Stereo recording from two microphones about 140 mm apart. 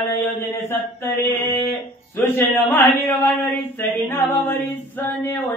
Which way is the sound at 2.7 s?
15° left (ahead or behind).